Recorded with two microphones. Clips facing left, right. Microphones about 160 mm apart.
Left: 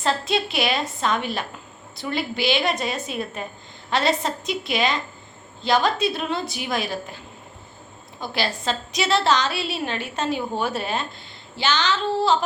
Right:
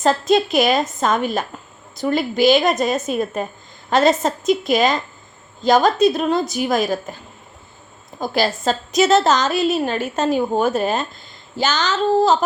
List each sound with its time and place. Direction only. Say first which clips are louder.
0.0 s a woman's voice: right 7 dB; 45° right (ahead or behind)
8.2 s a woman's voice: right 7 dB; 45° right (ahead or behind)